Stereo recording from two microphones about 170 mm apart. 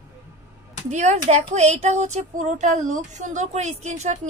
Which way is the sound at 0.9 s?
45° right (ahead or behind).